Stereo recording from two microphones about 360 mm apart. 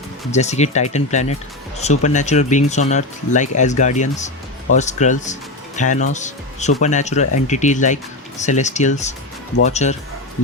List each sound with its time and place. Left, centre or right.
0.3 s speech: centre